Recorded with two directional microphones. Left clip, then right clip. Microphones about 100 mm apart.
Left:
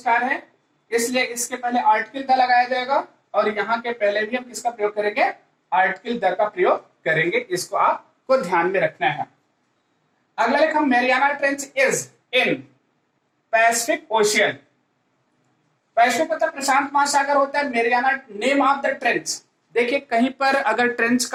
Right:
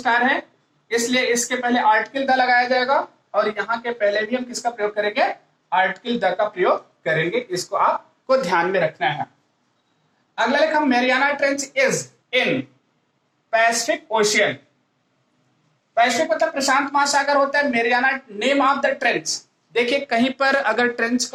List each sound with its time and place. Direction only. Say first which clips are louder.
0.0 s speech: right 2 dB; 40° right (ahead or behind)
10.3 s speech: even; 35° right (ahead or behind)
16.0 s speech: even; 30° right (ahead or behind)
19.7 s speech: even; 50° right (ahead or behind)